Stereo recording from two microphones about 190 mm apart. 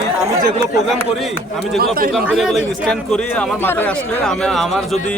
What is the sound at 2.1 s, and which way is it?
A man's voice, centre (ahead or behind).